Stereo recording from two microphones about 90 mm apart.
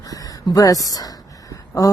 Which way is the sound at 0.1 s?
45° left (ahead or behind).